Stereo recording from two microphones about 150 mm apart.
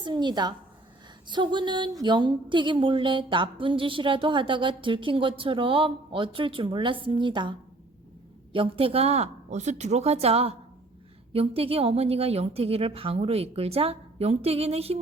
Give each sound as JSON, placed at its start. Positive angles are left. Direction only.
{"t": 0.0, "sound": "a woman's voice", "side_deg": -30}
{"t": 8.5, "sound": "a woman's voice", "side_deg": -35}